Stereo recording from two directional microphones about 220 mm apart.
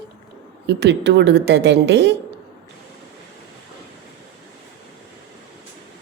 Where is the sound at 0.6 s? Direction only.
50° right (ahead or behind).